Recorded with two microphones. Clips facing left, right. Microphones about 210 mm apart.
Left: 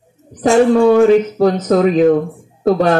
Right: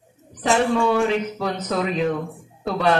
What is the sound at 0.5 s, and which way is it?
Speech, 45° left (ahead or behind).